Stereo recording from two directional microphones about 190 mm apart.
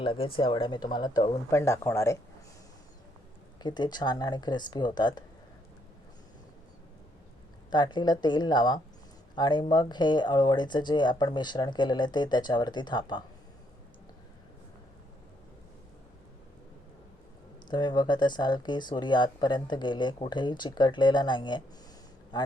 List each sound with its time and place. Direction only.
0.0 s speech: 30° left (ahead or behind)
3.6 s speech: 20° left (ahead or behind)
7.7 s speech: 25° left (ahead or behind)
17.7 s speech: 20° left (ahead or behind)